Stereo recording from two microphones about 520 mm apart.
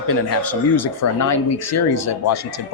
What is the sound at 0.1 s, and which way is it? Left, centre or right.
Speech, left.